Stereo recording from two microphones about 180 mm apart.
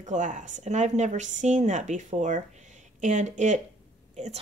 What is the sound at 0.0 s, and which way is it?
Speech, 45° right (ahead or behind).